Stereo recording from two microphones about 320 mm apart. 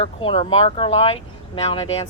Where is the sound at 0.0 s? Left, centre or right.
Centre.